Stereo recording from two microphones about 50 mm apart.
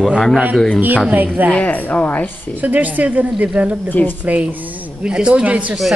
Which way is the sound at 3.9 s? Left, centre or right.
Left.